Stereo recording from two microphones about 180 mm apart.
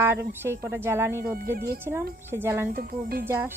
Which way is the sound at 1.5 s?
55° right (ahead or behind).